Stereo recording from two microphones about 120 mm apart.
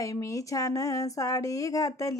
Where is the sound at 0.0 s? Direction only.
25° left (ahead or behind).